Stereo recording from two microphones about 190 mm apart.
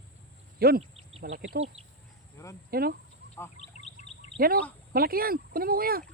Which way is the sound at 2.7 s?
55° right (ahead or behind).